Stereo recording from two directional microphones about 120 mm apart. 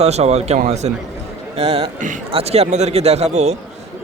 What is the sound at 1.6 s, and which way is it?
Speech, 55° right (ahead or behind).